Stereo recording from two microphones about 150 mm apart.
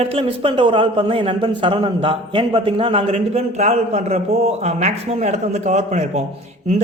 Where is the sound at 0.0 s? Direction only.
40° right (ahead or behind).